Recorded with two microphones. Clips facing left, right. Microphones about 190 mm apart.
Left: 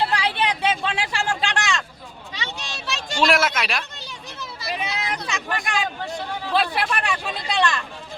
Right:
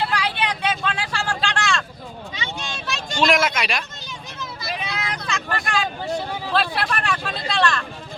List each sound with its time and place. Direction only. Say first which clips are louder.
0.0 s vehicle: left 1 dB; 25° left (ahead or behind)
3.2 s speech: right 1 dB; 5° left (ahead or behind)
4.7 s vehicle: left 2 dB; 15° left (ahead or behind)
6.5 s speech: left 1 dB; 15° left (ahead or behind)